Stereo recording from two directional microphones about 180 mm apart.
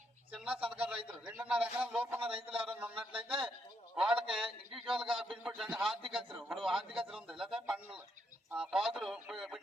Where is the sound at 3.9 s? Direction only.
5° right (ahead or behind).